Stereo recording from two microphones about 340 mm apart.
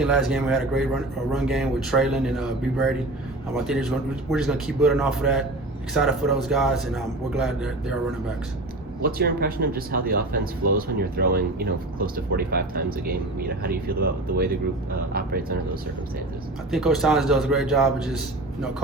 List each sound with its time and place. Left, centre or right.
0.0 s a man's voice: centre
9.0 s speech: right
16.7 s a man's voice: centre